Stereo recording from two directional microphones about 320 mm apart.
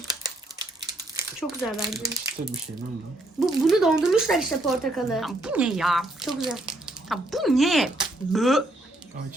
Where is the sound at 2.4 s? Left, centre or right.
Right.